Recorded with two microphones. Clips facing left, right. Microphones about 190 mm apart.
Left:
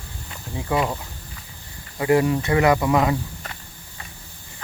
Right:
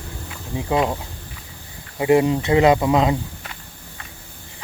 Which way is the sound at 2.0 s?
20° right (ahead or behind).